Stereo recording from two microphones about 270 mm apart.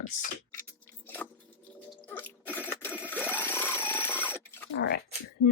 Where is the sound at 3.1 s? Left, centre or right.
Centre.